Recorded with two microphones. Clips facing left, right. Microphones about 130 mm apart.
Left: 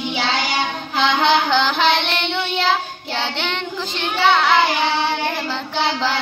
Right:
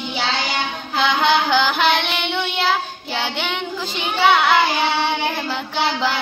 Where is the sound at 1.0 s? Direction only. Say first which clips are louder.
Left 1 dB; 5° right (ahead or behind).